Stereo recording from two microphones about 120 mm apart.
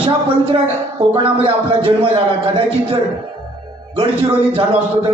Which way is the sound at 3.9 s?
50° right (ahead or behind).